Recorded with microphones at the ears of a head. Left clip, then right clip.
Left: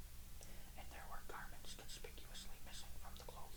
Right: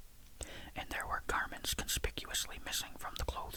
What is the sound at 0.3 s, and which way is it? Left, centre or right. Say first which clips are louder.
Whispering: right 16 dB; right.